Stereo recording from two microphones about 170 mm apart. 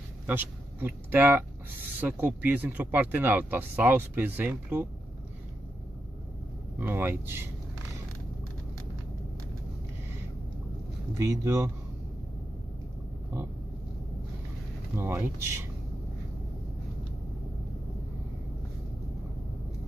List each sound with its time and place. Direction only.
0.3 s speech: 10° right (ahead or behind)
6.8 s speech: 15° right (ahead or behind)
11.1 s speech: 15° right (ahead or behind)
15.0 s speech: 15° right (ahead or behind)